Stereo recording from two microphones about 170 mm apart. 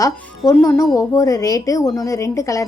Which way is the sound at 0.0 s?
20° left (ahead or behind).